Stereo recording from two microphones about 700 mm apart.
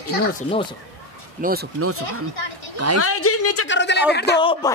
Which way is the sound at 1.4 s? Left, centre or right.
Centre.